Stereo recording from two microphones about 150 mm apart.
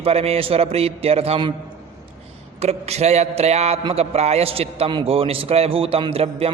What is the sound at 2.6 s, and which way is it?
A man's voice, 45° right (ahead or behind).